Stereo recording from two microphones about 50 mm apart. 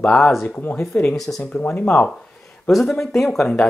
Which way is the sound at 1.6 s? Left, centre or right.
Centre.